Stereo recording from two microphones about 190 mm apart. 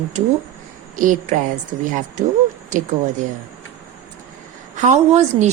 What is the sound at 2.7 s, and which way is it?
Speech, 40° right (ahead or behind).